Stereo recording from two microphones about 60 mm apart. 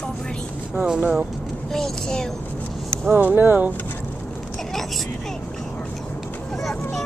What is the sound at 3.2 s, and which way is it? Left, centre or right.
Speech, right.